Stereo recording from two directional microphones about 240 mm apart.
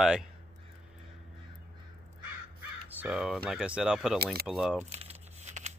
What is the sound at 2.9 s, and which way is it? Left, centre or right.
Speech, centre.